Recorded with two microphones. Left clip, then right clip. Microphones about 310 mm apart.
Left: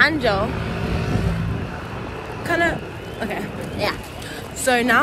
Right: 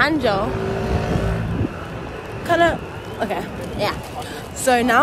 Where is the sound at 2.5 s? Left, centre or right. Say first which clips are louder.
Right 4 dB; centre.